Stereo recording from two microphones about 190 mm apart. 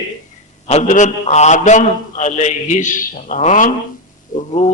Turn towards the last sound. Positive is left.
turn(degrees=35)  # may be behind; listen again after turning